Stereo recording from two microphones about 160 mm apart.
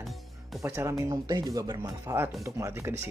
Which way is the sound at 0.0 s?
Centre (ahead or behind).